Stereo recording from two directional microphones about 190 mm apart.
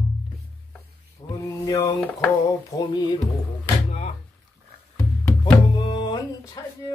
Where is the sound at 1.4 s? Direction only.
15° left (ahead or behind).